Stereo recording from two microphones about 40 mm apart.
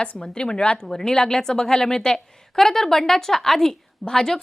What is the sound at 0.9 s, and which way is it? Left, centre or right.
A woman's voice, centre.